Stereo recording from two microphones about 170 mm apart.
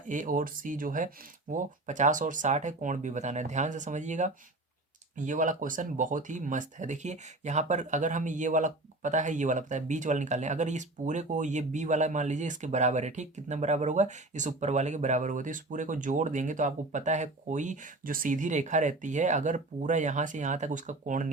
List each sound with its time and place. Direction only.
0.1 s speech: 50° right (ahead or behind)